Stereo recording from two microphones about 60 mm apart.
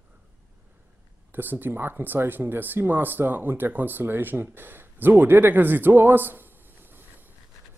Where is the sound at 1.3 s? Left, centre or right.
Right.